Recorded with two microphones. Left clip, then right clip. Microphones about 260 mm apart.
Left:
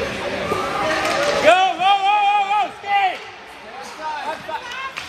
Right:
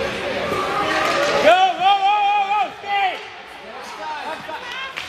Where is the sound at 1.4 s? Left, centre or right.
Left.